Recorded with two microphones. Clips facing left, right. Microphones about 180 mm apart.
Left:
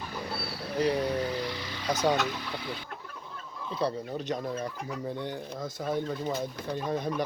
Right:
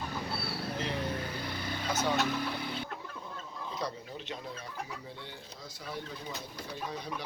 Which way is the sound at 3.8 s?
30° left (ahead or behind).